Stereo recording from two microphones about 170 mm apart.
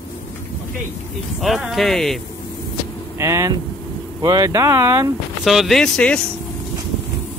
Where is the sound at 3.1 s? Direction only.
15° right (ahead or behind).